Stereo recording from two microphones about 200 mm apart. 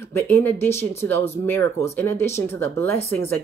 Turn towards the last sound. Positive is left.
turn(degrees=10)  # may be behind; listen again after turning